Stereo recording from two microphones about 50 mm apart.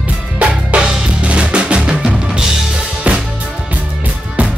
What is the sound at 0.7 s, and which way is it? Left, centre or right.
Drum, right.